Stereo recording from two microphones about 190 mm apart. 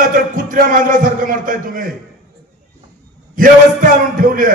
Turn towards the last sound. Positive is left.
turn(degrees=-45)  # may be behind; listen again after turning